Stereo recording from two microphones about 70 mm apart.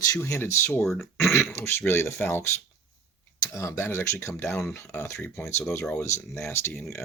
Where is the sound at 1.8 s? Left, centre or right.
Left.